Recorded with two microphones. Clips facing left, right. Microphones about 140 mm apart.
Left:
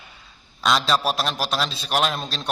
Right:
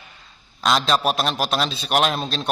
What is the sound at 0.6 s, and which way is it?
A man's voice, centre (ahead or behind).